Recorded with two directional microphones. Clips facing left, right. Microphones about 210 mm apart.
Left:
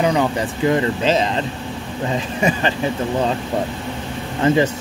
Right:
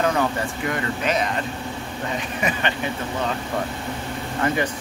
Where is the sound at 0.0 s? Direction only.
15° left (ahead or behind).